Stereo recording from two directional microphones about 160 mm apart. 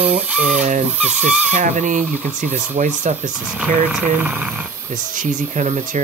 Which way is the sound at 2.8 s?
50° right (ahead or behind).